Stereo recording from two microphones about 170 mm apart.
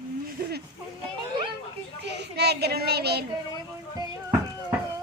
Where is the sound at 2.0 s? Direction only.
80° right.